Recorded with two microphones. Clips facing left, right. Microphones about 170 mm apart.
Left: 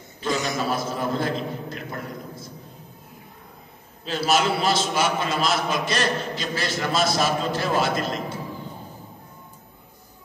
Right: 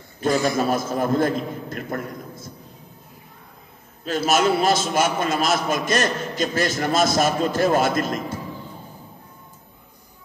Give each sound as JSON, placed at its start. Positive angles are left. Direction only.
{"t": 0.2, "sound": "a man's voice", "side_deg": -50}
{"t": 4.3, "sound": "a man's voice", "side_deg": -50}